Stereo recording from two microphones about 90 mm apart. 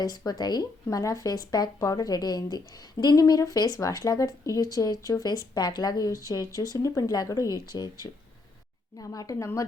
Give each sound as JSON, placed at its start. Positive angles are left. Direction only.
{"t": 0.3, "sound": "a woman's voice", "side_deg": 50}